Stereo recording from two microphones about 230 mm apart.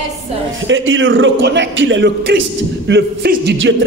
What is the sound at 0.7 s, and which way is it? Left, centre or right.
Speech, right.